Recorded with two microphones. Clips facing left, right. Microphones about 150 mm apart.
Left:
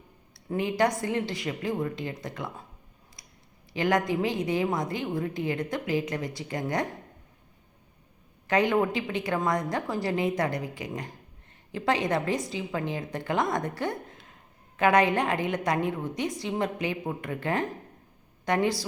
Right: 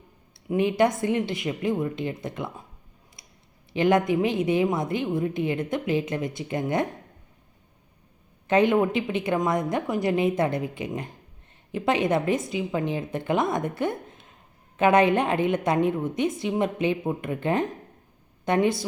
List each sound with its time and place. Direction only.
0.4 s a woman's voice: 20° right (ahead or behind)
3.2 s a sound: 25° right (ahead or behind)
3.7 s a woman's voice: 20° right (ahead or behind)
8.4 s a woman's voice: 20° right (ahead or behind)